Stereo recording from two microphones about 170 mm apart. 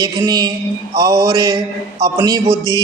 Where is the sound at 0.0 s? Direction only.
25° right (ahead or behind).